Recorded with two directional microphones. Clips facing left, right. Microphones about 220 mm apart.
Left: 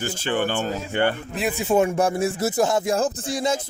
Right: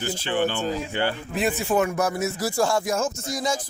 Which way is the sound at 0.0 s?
50° left (ahead or behind).